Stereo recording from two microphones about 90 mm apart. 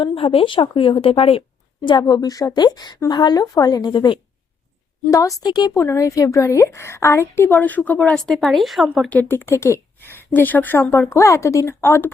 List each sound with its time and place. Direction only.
0.0 s a woman's voice: 75° left (ahead or behind); by 4.2 s 55° left (ahead or behind)
5.1 s a woman's voice: 40° left (ahead or behind)
5.7 s a woman's voice: 30° left (ahead or behind)
8.3 s speech: 5° left (ahead or behind)
9.0 s a woman's voice: 20° left (ahead or behind)